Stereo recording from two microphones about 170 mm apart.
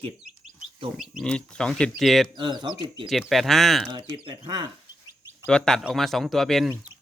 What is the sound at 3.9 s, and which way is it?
Speech, 30° right (ahead or behind).